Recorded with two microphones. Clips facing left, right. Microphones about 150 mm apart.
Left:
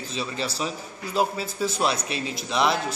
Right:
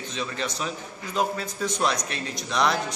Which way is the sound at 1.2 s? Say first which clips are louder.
Left 2 dB; 5° left (ahead or behind).